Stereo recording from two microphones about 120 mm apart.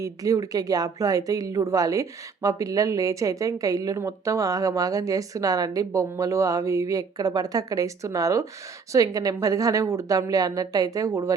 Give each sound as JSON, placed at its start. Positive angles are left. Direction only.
{"t": 0.0, "sound": "speech", "side_deg": -30}